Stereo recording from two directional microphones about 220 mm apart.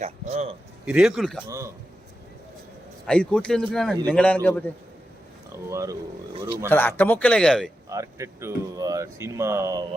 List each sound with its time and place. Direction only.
0.0 s a man's voice: 30° right (ahead or behind)
0.9 s speech: 5° right (ahead or behind)
1.5 s speech: 15° right (ahead or behind)
3.1 s speech: 5° left (ahead or behind)
5.7 s speech: 15° right (ahead or behind)
6.7 s speech: 10° left (ahead or behind)
7.9 s speech: 15° right (ahead or behind)